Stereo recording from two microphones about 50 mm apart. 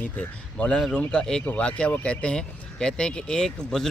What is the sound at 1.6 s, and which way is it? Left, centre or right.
A man's voice, left.